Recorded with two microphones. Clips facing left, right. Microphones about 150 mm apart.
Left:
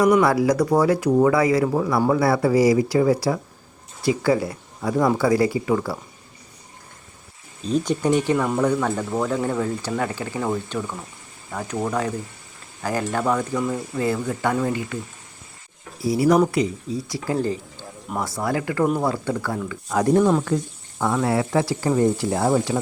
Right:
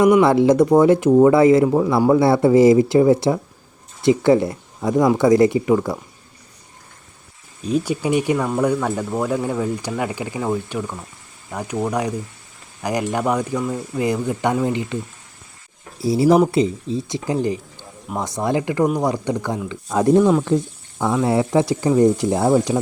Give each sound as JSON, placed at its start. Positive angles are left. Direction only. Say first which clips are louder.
{"t": 0.2, "sound": "speech", "louder": "right 5 dB", "side_deg": -25}
{"t": 1.6, "sound": "speech", "louder": "right 5 dB", "side_deg": -10}
{"t": 2.1, "sound": "speech", "louder": "right 6 dB", "side_deg": -25}
{"t": 7.6, "sound": "speech", "louder": "right 1 dB", "side_deg": -10}
{"t": 16.0, "sound": "speech", "louder": "right 3 dB", "side_deg": -25}
{"t": 20.1, "sound": "speech", "louder": "right 3 dB", "side_deg": 0}
{"t": 21.2, "sound": "speech", "louder": "right 6 dB", "side_deg": -20}